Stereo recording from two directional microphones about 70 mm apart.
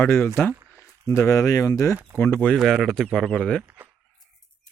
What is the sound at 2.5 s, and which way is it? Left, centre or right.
Speech, centre.